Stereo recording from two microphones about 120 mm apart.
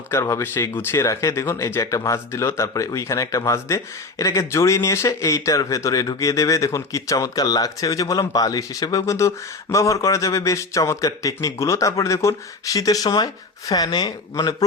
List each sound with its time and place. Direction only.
0.1 s a man's voice: 25° left (ahead or behind)